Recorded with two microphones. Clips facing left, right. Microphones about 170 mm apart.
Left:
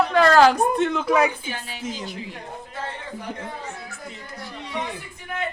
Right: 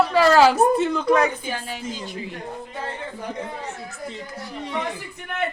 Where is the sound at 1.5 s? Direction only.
45° right (ahead or behind).